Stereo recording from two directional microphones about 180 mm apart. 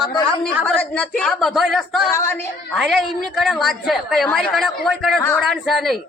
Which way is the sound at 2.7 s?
Centre (ahead or behind).